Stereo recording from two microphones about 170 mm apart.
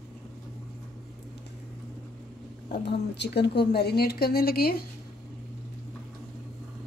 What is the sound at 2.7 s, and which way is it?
Speech, 80° left.